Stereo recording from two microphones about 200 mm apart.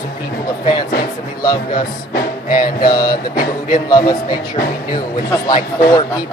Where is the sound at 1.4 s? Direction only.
20° left (ahead or behind).